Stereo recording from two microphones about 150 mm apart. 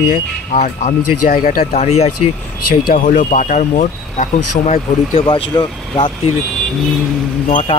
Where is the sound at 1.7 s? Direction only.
50° left (ahead or behind).